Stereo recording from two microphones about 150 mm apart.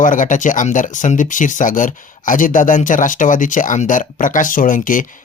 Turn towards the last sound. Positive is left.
turn(degrees=65)  # may be behind; listen again after turning